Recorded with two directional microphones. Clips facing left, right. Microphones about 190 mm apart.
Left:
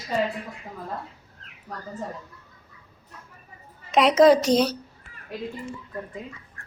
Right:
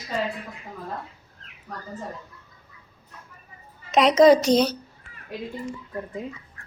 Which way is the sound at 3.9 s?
5° left (ahead or behind).